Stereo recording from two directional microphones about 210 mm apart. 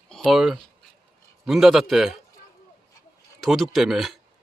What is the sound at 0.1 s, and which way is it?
A man's voice, centre (ahead or behind).